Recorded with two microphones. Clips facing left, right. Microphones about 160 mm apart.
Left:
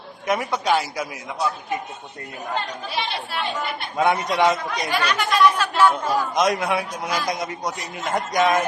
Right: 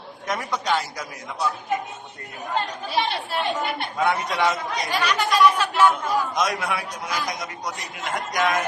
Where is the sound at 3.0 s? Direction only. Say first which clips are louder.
Right 4 dB; 45° right (ahead or behind).